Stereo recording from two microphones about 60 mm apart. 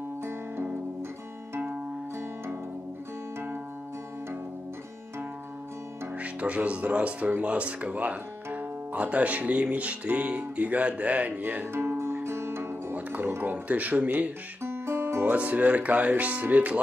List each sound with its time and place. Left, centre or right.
0.2 s music: right
6.1 s speech: right
7.4 s music: right
12.0 s music: right
12.9 s music: right
14.6 s music: right
15.2 s music: right